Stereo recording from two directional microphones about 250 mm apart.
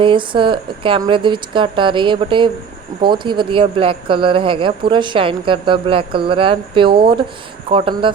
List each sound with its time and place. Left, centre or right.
0.0 s speech: centre